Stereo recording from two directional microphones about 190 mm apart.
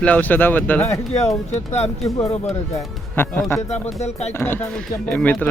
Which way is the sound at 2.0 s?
15° left (ahead or behind).